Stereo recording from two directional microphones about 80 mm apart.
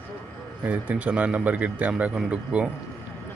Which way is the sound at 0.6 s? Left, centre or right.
Centre.